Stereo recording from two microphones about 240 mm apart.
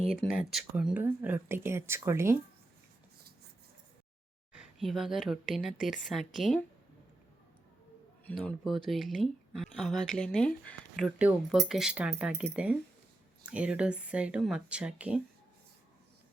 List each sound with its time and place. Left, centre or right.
0.1 s speech: centre
4.5 s speech: centre
8.3 s speech: centre